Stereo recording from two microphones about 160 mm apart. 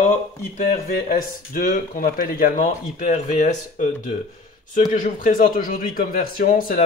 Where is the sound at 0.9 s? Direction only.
60° left (ahead or behind).